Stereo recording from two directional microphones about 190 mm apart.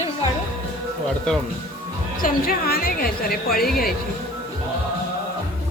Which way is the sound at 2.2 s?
50° left (ahead or behind).